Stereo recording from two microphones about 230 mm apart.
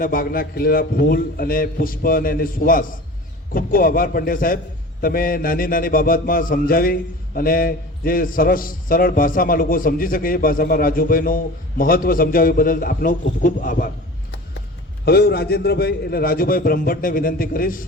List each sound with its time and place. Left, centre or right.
0.0 s a man's voice: left